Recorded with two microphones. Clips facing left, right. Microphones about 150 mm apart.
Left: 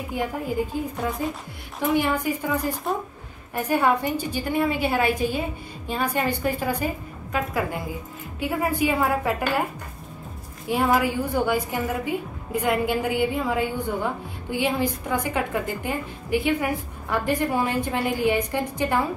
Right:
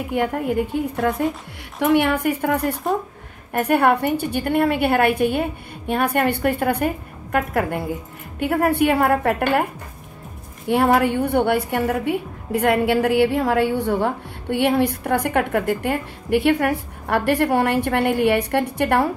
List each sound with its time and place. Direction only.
0.1 s a woman's voice: 70° right (ahead or behind)
10.7 s a woman's voice: 65° right (ahead or behind)